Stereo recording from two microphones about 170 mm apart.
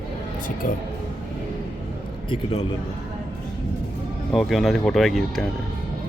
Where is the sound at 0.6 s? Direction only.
50° left (ahead or behind).